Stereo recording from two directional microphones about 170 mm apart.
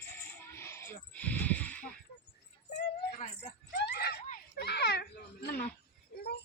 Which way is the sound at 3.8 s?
70° left (ahead or behind).